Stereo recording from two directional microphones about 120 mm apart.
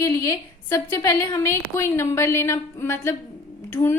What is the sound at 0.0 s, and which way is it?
A woman's voice, 25° left (ahead or behind).